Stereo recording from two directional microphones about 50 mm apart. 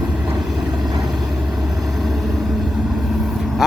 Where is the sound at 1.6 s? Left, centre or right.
Centre.